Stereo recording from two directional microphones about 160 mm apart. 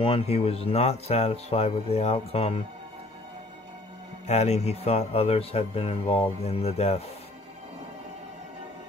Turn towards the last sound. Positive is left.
turn(degrees=40)  # may be behind; listen again after turning